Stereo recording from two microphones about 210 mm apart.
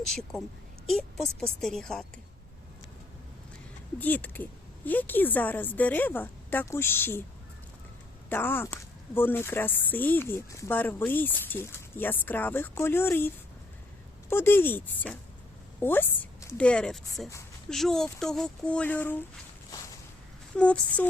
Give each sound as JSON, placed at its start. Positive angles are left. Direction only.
{"t": 0.1, "sound": "speech", "side_deg": 0}
{"t": 3.9, "sound": "speech", "side_deg": 10}
{"t": 8.3, "sound": "speech", "side_deg": 10}
{"t": 20.6, "sound": "speech", "side_deg": 5}